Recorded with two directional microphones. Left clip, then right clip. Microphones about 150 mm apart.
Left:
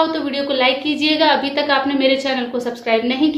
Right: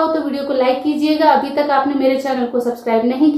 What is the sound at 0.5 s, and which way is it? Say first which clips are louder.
A woman's voice: right 2 dB; 45° right (ahead or behind).